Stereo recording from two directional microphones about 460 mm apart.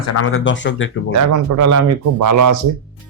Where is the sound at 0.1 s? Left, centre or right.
Left.